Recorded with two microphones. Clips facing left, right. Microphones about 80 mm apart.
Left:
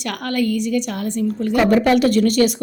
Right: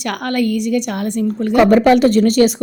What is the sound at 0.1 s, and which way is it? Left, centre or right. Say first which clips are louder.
Speech: right 3 dB; right.